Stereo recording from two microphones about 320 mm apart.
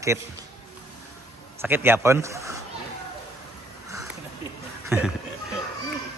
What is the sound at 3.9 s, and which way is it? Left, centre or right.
Sniff, centre.